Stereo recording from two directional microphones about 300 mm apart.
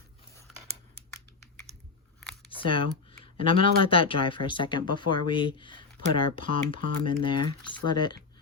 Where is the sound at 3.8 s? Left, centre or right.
Centre.